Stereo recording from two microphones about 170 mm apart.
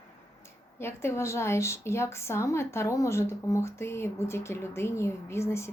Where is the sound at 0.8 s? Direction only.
15° left (ahead or behind).